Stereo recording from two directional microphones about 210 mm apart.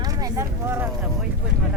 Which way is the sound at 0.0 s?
15° right (ahead or behind).